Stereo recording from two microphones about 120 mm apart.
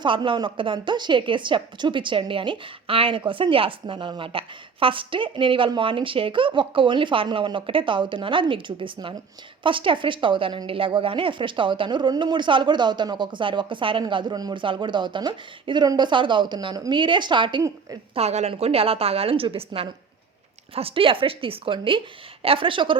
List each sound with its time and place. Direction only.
0.0 s a woman's voice: 45° right (ahead or behind)
18.1 s a woman's voice: 60° right (ahead or behind); by 23.0 s 45° right (ahead or behind)